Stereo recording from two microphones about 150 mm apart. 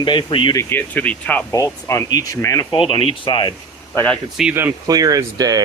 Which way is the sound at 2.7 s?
35° left (ahead or behind).